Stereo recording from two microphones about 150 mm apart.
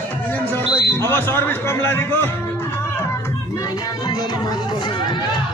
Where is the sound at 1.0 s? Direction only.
15° left (ahead or behind).